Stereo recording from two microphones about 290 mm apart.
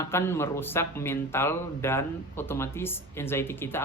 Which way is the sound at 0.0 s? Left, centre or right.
Centre.